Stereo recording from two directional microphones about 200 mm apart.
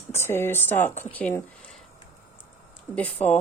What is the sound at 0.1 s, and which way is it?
Speech, 10° left (ahead or behind).